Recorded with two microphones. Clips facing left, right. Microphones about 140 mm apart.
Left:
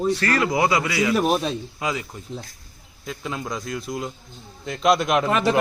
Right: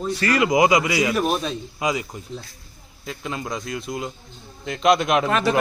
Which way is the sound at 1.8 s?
15° right (ahead or behind).